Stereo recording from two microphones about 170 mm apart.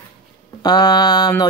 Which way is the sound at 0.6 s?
25° left (ahead or behind).